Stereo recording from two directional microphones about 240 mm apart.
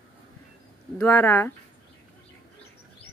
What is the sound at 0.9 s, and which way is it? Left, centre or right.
Speech, centre.